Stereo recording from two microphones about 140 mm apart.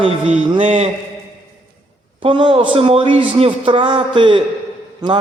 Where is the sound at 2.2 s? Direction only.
35° right (ahead or behind).